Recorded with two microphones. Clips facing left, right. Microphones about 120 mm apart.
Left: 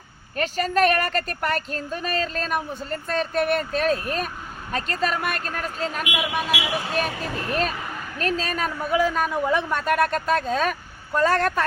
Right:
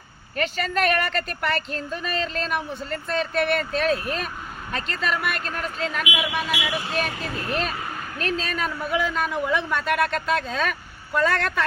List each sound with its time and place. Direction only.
0.3 s a woman's voice: 40° left (ahead or behind)
8.2 s a man's voice: 40° left (ahead or behind)